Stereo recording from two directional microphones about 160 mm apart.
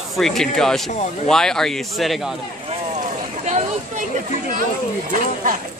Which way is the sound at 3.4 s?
45° right (ahead or behind).